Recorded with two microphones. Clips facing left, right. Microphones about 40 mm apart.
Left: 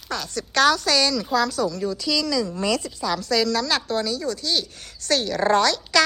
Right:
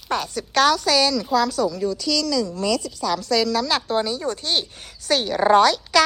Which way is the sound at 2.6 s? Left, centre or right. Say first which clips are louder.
Right 1 dB; left.